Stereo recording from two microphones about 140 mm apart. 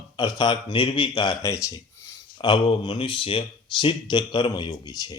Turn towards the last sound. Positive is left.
turn(degrees=30)  # may be behind; listen again after turning